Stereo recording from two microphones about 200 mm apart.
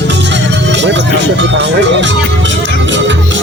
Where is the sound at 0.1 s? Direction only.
60° right (ahead or behind).